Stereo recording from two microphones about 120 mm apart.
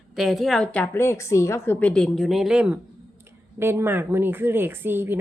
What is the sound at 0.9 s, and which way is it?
A woman's voice, 20° left (ahead or behind).